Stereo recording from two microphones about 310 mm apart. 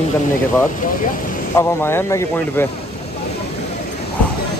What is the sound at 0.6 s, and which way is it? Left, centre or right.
Speech, left.